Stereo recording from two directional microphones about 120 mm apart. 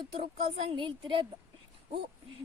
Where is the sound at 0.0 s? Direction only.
45° right (ahead or behind).